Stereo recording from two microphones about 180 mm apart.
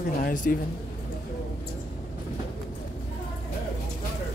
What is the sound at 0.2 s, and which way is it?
Speech, 50° left (ahead or behind).